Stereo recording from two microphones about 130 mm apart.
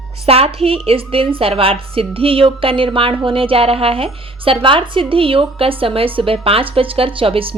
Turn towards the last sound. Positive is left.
turn(degrees=-45)  # may be behind; listen again after turning